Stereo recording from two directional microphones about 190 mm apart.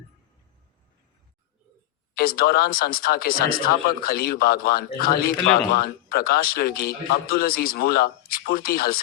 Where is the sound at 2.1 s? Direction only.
50° left (ahead or behind).